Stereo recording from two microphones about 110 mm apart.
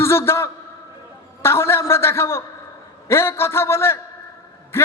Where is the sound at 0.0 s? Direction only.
25° left (ahead or behind).